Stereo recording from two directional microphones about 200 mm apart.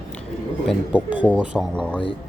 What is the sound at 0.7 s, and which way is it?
Speech, 5° right (ahead or behind).